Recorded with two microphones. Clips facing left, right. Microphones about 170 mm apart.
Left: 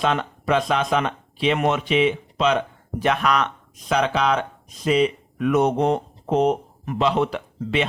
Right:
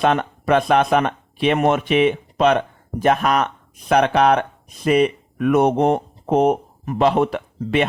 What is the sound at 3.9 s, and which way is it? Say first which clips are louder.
Speech: right 5 dB; 60° right (ahead or behind).